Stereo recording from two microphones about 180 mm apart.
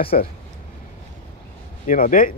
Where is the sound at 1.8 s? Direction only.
50° left (ahead or behind).